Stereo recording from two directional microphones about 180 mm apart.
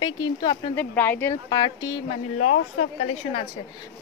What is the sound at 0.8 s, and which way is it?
Speech, 10° left (ahead or behind).